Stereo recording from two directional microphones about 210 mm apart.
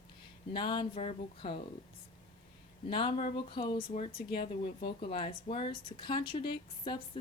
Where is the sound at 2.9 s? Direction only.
25° left (ahead or behind).